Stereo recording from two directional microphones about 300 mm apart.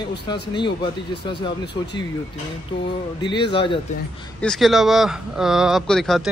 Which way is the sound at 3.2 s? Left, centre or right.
Centre.